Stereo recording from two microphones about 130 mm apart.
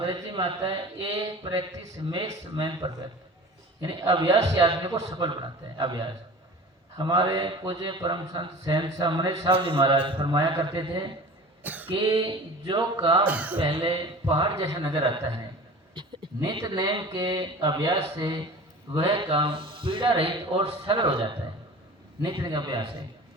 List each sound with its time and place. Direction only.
0.4 s a man's voice: 40° right (ahead or behind)
1.1 s a man's voice: 25° right (ahead or behind)
11.6 s cough: 15° right (ahead or behind)
11.9 s a man's voice: 45° right (ahead or behind)
13.2 s speech: 10° right (ahead or behind)
13.6 s a man's voice: 40° right (ahead or behind)
14.6 s a man's voice: 20° right (ahead or behind)
16.0 s a man's voice: 35° right (ahead or behind)
19.0 s a man's voice: 40° right (ahead or behind)